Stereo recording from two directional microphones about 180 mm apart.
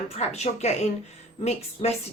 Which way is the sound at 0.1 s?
35° left (ahead or behind).